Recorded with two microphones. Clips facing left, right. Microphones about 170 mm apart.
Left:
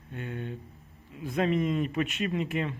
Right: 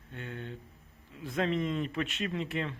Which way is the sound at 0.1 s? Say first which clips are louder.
Left 5 dB; 10° left (ahead or behind).